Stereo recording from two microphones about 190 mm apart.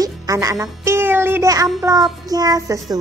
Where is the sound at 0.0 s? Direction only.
20° right (ahead or behind).